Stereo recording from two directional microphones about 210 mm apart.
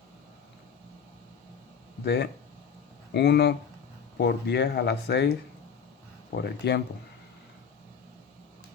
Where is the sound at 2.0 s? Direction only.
50° left (ahead or behind).